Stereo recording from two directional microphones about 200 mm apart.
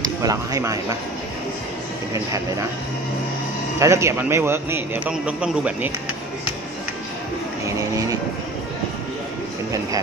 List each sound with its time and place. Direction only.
0.0 s speech: 20° right (ahead or behind)
3.8 s a man's voice: 15° right (ahead or behind)